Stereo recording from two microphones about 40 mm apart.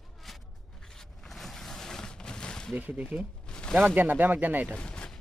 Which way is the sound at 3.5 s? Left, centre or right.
Left.